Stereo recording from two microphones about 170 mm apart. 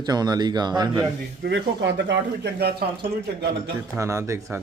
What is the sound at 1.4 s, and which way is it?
Speech, 90° right.